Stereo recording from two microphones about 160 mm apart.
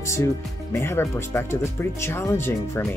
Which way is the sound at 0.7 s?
15° left (ahead or behind).